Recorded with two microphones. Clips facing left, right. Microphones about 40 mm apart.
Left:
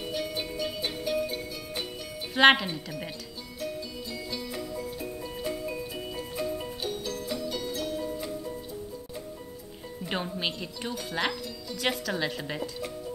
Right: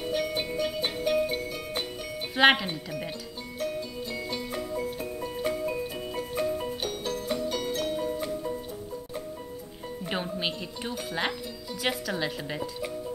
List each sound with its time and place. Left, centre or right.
0.1 s music: right
2.3 s speech: centre
4.3 s music: right
10.0 s speech: centre